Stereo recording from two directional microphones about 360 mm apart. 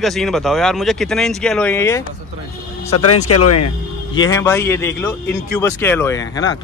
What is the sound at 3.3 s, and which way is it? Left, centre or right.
Speech, left.